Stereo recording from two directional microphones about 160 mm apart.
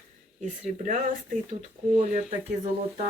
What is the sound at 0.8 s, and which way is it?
Speech, 50° right (ahead or behind).